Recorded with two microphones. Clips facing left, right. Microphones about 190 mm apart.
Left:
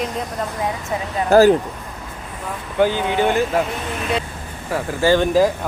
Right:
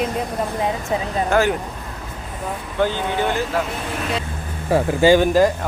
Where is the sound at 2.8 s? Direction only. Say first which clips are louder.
Left 3 dB; 15° left (ahead or behind).